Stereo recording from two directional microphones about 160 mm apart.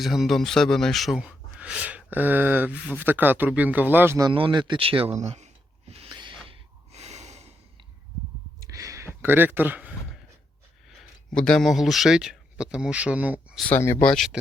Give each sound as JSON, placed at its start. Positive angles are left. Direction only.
{"t": 0.0, "sound": "speech", "side_deg": 0}
{"t": 4.3, "sound": "speech", "side_deg": -30}
{"t": 6.0, "sound": "snort", "side_deg": -30}
{"t": 6.5, "sound": "gasp", "side_deg": -45}
{"t": 8.6, "sound": "a sound", "side_deg": -20}
{"t": 10.8, "sound": "speech", "side_deg": 5}
{"t": 13.6, "sound": "speech", "side_deg": 10}
{"t": 14.1, "sound": "speech", "side_deg": 0}